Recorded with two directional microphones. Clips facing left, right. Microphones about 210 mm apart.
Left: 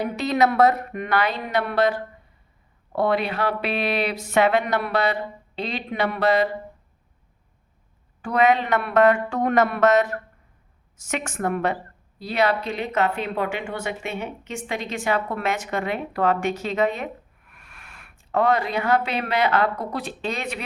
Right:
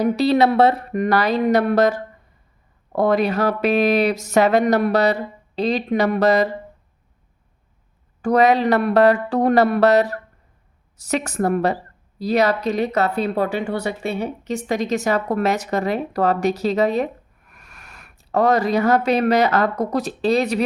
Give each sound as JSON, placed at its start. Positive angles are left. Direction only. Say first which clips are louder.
{"t": 0.0, "sound": "speech", "louder": "right 5 dB", "side_deg": -35}
{"t": 8.2, "sound": "speech", "louder": "right 4 dB", "side_deg": -40}